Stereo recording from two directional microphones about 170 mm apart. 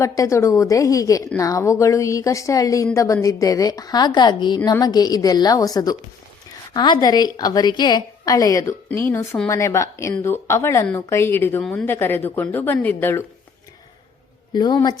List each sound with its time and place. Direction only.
0.0 s a woman's voice: 20° left (ahead or behind)
14.5 s a woman's voice: 25° left (ahead or behind)